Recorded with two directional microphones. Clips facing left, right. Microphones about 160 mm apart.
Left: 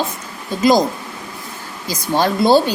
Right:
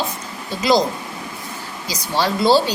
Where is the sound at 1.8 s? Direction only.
50° left (ahead or behind).